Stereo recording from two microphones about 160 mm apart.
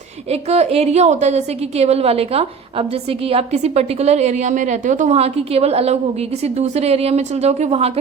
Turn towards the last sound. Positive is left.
turn(degrees=-40)  # may be behind; listen again after turning